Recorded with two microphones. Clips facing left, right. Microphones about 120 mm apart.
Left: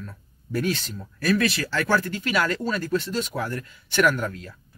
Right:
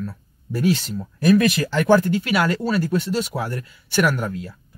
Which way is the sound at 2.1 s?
10° right (ahead or behind).